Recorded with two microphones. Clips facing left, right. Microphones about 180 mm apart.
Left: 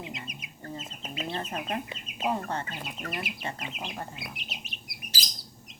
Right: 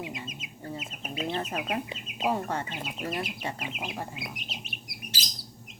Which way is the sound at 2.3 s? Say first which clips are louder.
Right 1 dB; 10° right (ahead or behind).